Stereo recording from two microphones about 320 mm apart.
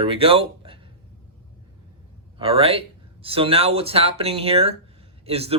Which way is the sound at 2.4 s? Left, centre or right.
Centre.